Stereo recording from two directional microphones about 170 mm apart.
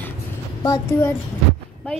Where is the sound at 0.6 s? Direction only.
15° left (ahead or behind).